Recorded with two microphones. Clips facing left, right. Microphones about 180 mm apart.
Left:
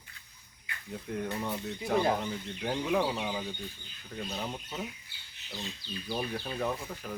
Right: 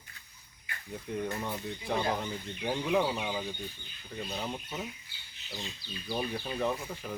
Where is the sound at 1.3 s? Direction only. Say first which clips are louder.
Left 1 dB; 5° left (ahead or behind).